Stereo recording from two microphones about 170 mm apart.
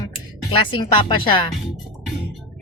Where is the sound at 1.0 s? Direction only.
30° left (ahead or behind).